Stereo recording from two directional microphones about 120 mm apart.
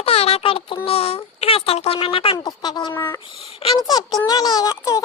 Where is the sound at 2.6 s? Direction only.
35° left (ahead or behind).